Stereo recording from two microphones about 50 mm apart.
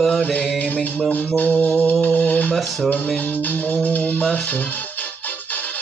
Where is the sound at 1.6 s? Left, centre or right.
Left.